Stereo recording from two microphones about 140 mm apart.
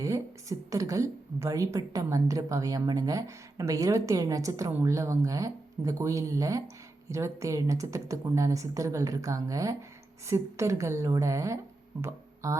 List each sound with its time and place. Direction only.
0.0 s speech: 25° right (ahead or behind)
12.0 s music: 20° right (ahead or behind)